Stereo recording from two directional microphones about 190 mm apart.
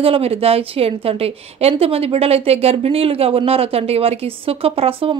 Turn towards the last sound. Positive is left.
turn(degrees=-30)  # may be behind; listen again after turning